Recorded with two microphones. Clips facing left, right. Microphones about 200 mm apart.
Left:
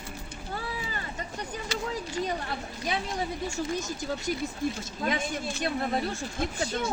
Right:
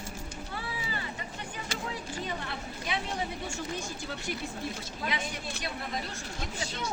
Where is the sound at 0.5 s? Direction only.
45° left (ahead or behind).